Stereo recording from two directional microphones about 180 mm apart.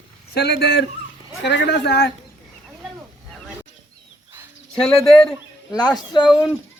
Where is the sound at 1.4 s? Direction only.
80° left.